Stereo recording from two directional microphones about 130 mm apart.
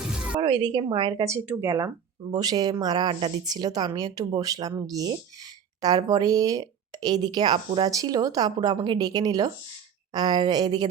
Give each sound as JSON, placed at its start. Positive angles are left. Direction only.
{"t": 0.1, "sound": "a sound", "side_deg": -5}
{"t": 0.4, "sound": "a woman's voice", "side_deg": -35}
{"t": 1.3, "sound": "a woman's voice", "side_deg": -20}